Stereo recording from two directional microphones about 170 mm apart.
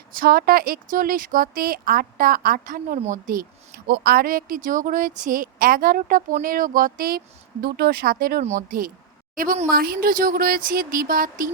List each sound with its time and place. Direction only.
0.1 s a woman's voice: 60° right (ahead or behind)